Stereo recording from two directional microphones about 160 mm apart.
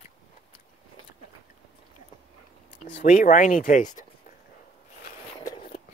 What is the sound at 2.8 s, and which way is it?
Speech, 75° left (ahead or behind).